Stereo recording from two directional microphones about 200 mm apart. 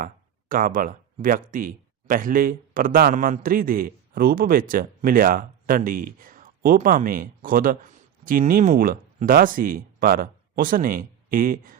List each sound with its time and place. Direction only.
0.0 s speech: 45° right (ahead or behind)